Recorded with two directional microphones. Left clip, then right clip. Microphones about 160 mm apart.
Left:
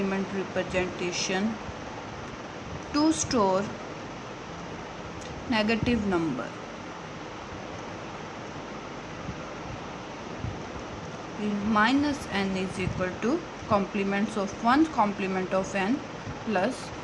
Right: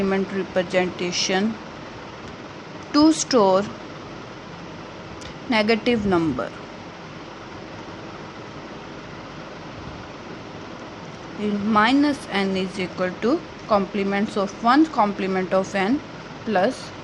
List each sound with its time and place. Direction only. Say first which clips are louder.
0.1 s speech: right 7 dB; 40° right (ahead or behind)
2.9 s speech: right 8 dB; 35° right (ahead or behind)
5.5 s speech: right 7 dB; 40° right (ahead or behind)
11.7 s speech: right 6 dB; 35° right (ahead or behind)